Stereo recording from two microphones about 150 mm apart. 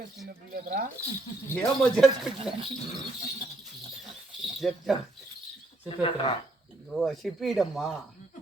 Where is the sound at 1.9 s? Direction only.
Centre (ahead or behind).